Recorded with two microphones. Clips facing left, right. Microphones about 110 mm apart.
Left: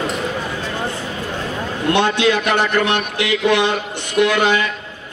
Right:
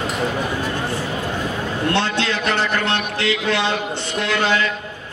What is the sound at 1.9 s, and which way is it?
A man's voice, 15° left (ahead or behind).